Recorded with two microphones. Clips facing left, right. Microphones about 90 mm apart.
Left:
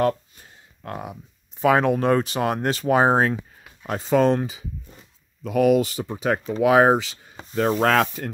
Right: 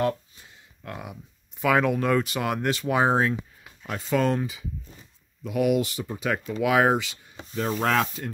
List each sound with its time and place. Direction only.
0.0 s a sound: 45° left (ahead or behind)
1.6 s speech: 35° left (ahead or behind)
5.5 s speech: 40° left (ahead or behind)
7.5 s rub: 60° left (ahead or behind)